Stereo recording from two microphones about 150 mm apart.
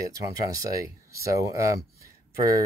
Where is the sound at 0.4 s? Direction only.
25° right (ahead or behind).